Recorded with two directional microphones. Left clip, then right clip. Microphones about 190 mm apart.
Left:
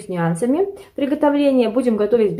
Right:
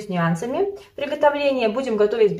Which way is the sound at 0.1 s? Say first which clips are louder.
Left 4 dB; 45° left (ahead or behind).